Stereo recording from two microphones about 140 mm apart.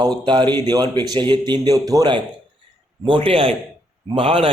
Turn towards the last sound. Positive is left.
turn(degrees=-40)  # may be behind; listen again after turning